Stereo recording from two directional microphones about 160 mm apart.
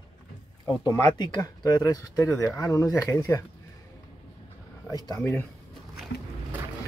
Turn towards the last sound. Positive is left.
turn(degrees=10)  # may be behind; listen again after turning